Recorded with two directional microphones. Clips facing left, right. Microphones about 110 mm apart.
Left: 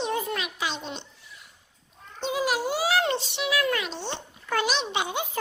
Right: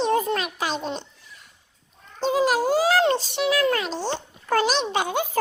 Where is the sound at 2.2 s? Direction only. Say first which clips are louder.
Right 6 dB; 40° right (ahead or behind).